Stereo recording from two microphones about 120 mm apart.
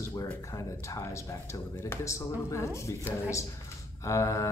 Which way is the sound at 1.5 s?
25° left (ahead or behind).